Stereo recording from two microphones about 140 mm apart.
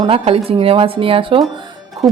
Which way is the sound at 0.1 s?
45° right (ahead or behind).